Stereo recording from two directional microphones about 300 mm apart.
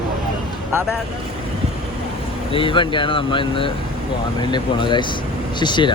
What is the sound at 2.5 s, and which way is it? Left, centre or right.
Speech, centre.